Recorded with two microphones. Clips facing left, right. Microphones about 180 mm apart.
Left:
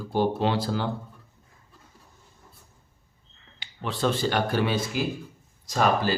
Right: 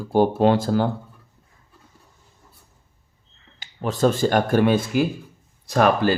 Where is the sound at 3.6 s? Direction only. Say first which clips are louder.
Right 7 dB; 45° right (ahead or behind).